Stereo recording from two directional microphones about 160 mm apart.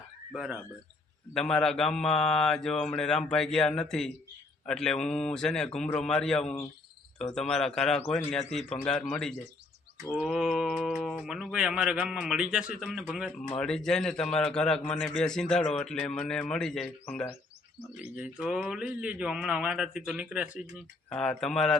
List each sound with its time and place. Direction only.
0.3 s a man's voice: 5° right (ahead or behind)
17.9 s speech: 5° right (ahead or behind)
21.1 s a man's voice: 5° left (ahead or behind)